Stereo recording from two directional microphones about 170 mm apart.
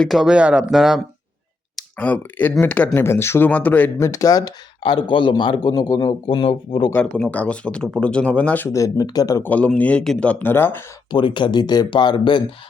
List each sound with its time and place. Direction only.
0.0 s speech: centre (ahead or behind); by 6.9 s 30° left (ahead or behind)
6.9 s speech: 5° left (ahead or behind)
9.5 s speech: 10° left (ahead or behind)
11.1 s speech: 30° left (ahead or behind)